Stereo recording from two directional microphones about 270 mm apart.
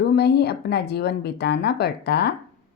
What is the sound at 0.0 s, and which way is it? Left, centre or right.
A woman's voice, left.